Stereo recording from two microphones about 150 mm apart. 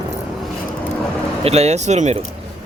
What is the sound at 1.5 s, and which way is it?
Speech, 45° right (ahead or behind).